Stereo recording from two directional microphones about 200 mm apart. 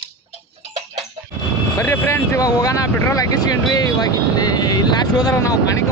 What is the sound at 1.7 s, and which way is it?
Speech, 10° left (ahead or behind).